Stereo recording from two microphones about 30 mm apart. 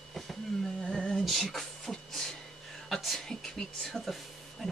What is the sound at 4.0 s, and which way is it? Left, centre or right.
Speech, left.